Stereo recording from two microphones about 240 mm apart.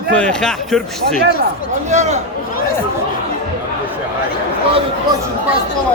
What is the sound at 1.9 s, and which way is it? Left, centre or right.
Speech, right.